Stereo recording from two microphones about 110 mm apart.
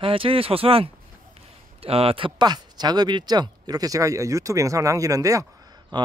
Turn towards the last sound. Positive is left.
turn(degrees=-40)  # may be behind; listen again after turning